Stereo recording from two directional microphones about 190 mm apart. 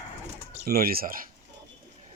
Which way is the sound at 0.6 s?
55° right (ahead or behind).